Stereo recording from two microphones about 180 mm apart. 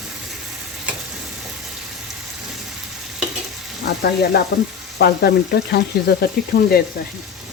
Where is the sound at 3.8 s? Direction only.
65° left (ahead or behind).